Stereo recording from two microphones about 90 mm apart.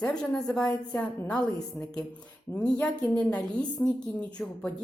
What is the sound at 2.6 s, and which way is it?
A woman's voice, 15° left (ahead or behind).